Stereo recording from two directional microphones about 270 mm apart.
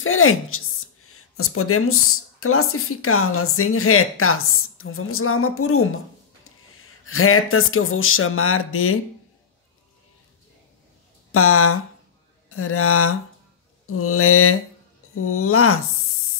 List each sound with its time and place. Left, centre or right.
0.0 s a woman's voice: left
7.1 s speech: left
11.3 s speech: left